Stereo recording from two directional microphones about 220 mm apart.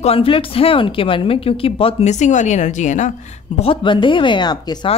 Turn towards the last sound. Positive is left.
turn(degrees=20)  # may be behind; listen again after turning